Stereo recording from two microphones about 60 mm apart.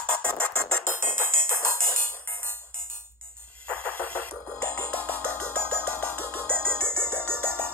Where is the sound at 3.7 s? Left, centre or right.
Left.